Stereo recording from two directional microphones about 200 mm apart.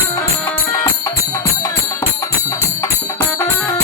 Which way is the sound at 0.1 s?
15° left (ahead or behind).